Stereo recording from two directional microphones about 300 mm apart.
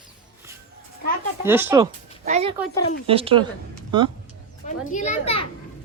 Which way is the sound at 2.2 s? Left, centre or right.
Right.